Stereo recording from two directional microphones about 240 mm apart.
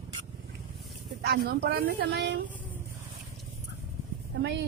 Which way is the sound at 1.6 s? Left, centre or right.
Right.